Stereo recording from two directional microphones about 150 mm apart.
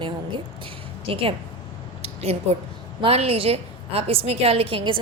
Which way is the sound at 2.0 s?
40° right (ahead or behind).